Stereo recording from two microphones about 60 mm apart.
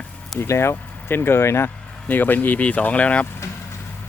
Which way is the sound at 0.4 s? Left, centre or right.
Left.